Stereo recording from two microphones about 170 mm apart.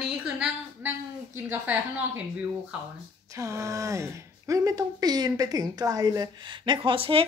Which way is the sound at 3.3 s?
20° right (ahead or behind).